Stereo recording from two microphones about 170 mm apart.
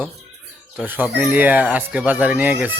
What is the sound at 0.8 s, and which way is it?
A man's voice, 10° right (ahead or behind).